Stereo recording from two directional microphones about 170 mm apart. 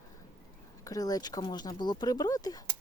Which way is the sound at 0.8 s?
20° left (ahead or behind).